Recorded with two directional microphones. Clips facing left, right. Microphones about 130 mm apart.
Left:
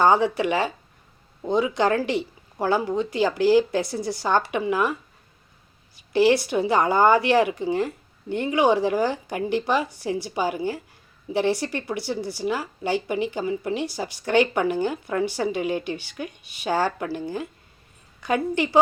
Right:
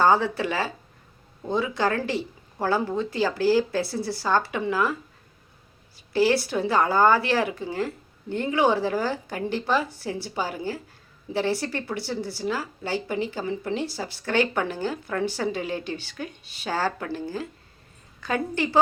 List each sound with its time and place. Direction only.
0.0 s speech: 15° left (ahead or behind)
6.1 s speech: 20° left (ahead or behind)